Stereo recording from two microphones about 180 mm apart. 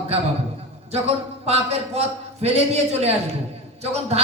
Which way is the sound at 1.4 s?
35° right (ahead or behind).